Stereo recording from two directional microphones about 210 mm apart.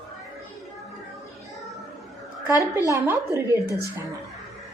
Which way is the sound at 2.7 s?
15° right (ahead or behind).